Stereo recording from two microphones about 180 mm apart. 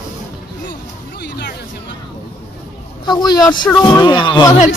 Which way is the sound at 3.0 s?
25° left (ahead or behind).